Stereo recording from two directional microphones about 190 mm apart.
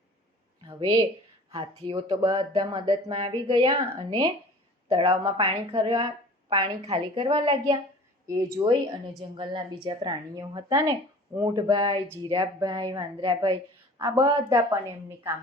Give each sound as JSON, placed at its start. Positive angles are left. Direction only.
{"t": 0.6, "sound": "a woman's voice", "side_deg": -25}